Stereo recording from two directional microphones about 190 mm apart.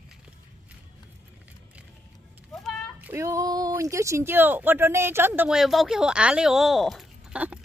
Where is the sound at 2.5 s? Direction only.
Centre (ahead or behind).